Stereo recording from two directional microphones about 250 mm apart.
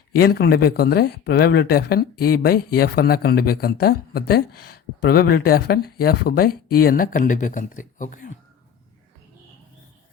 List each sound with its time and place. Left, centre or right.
0.1 s speech: left